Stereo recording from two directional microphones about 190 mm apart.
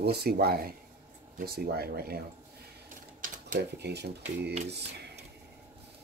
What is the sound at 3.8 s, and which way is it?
Speech, 60° right (ahead or behind).